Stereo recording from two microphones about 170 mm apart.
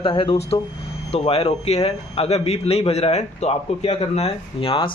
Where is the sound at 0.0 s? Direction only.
30° left (ahead or behind).